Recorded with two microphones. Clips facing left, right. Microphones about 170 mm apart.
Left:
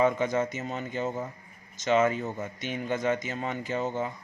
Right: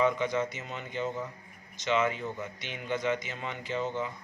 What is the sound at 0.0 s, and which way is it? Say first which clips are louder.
A man's voice: left 3 dB; 45° left (ahead or behind).